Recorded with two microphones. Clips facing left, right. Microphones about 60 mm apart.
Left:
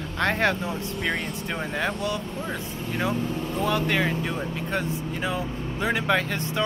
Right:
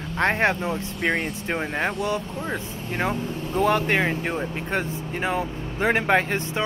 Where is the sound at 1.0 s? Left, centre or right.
Right.